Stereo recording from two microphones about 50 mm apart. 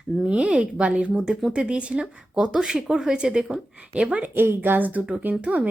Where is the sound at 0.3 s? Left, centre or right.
Right.